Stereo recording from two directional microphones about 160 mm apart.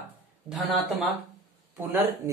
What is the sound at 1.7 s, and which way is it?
Speech, 15° right (ahead or behind).